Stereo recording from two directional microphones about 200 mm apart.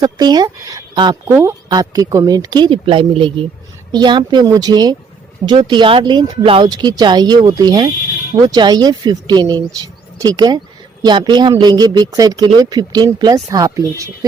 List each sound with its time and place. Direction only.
0.0 s speech: 20° right (ahead or behind)